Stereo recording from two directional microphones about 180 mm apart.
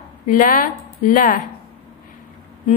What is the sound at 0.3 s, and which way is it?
A woman's voice, 50° left (ahead or behind).